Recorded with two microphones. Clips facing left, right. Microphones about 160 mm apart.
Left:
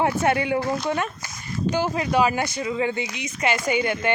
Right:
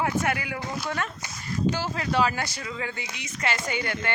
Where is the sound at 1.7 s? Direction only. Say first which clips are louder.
Left 5 dB; 15° left (ahead or behind).